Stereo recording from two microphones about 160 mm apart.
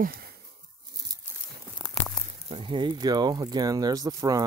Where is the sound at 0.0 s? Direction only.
70° right (ahead or behind).